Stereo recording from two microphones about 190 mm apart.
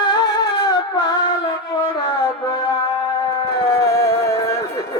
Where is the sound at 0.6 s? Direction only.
20° left (ahead or behind).